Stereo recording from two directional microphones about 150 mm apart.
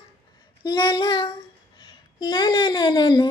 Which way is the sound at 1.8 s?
30° left (ahead or behind).